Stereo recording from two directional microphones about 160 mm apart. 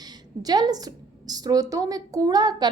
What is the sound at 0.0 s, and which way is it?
A woman's voice, 25° right (ahead or behind).